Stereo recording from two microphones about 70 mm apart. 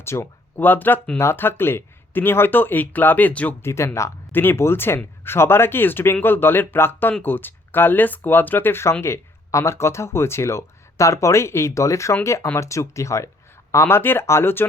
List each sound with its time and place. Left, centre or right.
0.0 s speech: left
0.5 s speech: left
3.6 s speech: left
4.3 s speech: left